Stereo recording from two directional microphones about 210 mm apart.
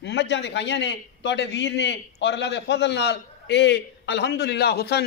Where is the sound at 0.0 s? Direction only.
55° left (ahead or behind).